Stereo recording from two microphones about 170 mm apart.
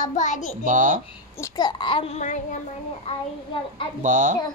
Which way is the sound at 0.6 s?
50° right (ahead or behind).